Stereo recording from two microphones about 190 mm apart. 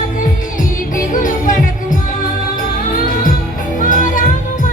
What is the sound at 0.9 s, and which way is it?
Music, 45° left (ahead or behind).